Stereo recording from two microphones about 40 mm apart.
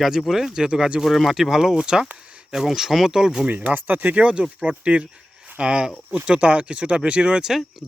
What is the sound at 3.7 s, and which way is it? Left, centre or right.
Speech, right.